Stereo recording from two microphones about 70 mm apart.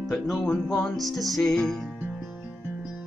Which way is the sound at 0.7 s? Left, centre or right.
Centre.